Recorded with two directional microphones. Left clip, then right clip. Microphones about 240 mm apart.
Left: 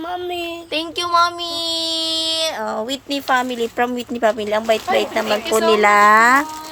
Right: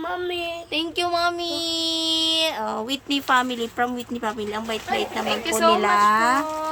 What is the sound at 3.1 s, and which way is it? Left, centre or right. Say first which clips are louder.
Speech: left 1 dB; centre.